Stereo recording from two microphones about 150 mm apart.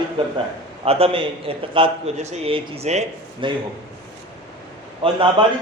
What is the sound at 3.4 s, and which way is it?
Speech, 35° right (ahead or behind).